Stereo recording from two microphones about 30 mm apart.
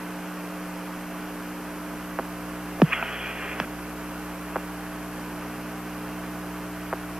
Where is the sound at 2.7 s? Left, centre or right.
Right.